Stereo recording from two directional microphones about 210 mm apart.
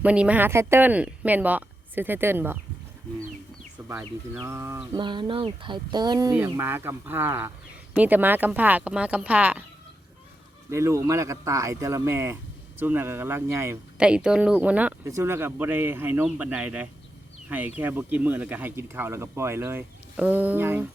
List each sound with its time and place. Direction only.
0.0 s speech: 5° right (ahead or behind)
3.8 s bird: 15° right (ahead or behind)
4.4 s a sound: 10° right (ahead or behind)
6.3 s speech: 10° right (ahead or behind)
10.7 s speech: 15° right (ahead or behind)